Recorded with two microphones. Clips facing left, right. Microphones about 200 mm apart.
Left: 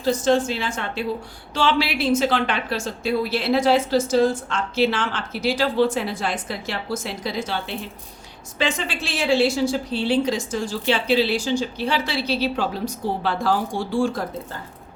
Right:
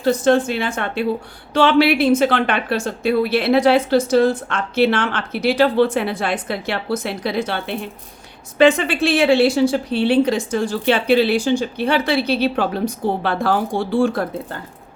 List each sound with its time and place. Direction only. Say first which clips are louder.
0.0 s a woman's voice: right 4 dB; 60° right (ahead or behind)